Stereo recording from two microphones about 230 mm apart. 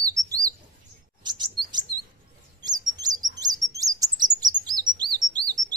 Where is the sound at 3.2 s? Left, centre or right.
Centre.